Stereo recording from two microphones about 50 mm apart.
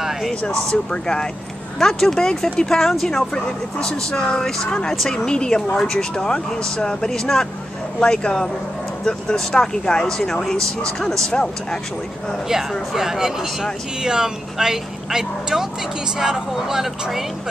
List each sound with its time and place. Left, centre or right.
0.3 s speech: centre
3.8 s speech: centre
12.9 s speech: centre